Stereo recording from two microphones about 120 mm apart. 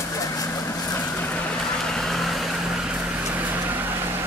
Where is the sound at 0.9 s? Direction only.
10° left (ahead or behind); by 3.9 s 15° right (ahead or behind).